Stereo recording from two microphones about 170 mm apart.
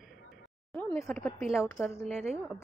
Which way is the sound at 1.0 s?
10° left (ahead or behind).